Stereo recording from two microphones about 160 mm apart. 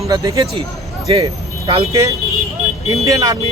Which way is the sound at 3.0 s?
20° right (ahead or behind).